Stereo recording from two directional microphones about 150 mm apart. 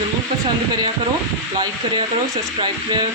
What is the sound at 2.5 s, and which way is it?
Speech, 30° right (ahead or behind).